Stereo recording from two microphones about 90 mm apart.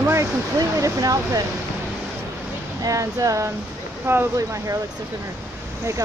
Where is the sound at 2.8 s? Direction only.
40° right (ahead or behind).